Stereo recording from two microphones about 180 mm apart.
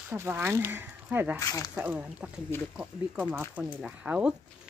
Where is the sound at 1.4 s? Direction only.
20° left (ahead or behind).